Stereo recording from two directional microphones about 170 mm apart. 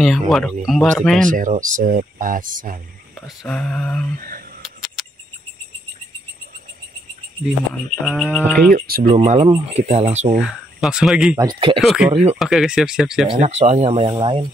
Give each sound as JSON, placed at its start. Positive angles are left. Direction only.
{"t": 0.0, "sound": "speech", "side_deg": 0}
{"t": 1.3, "sound": "speech", "side_deg": -50}
{"t": 3.2, "sound": "speech", "side_deg": 5}
{"t": 4.6, "sound": "a sound", "side_deg": 0}
{"t": 7.7, "sound": "speech", "side_deg": 5}
{"t": 8.7, "sound": "speech", "side_deg": -60}
{"t": 9.1, "sound": "speech", "side_deg": -40}
{"t": 10.3, "sound": "speech", "side_deg": -5}
{"t": 11.3, "sound": "speech", "side_deg": -30}
{"t": 11.8, "sound": "speech", "side_deg": 0}
{"t": 13.4, "sound": "speech", "side_deg": -40}